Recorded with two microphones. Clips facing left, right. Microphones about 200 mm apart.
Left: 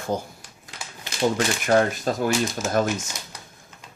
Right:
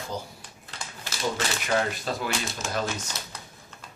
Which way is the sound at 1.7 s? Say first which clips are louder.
Left 7 dB; 45° left (ahead or behind).